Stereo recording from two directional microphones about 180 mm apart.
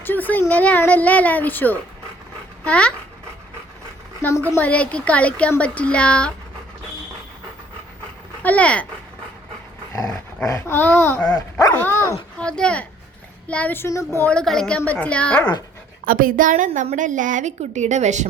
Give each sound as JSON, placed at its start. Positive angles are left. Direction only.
{"t": 0.0, "sound": "speech", "side_deg": 10}
{"t": 4.2, "sound": "a woman's voice", "side_deg": 15}
{"t": 8.4, "sound": "speech", "side_deg": 5}
{"t": 10.4, "sound": "speech", "side_deg": 15}
{"t": 16.0, "sound": "a woman's voice", "side_deg": -50}